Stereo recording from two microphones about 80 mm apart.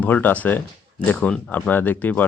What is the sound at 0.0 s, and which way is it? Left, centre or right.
Speech, left.